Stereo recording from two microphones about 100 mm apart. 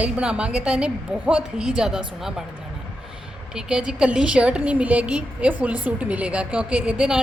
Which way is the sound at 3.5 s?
10° right (ahead or behind).